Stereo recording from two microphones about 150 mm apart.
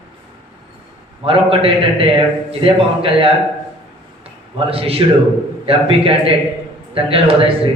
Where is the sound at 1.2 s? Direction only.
40° right (ahead or behind).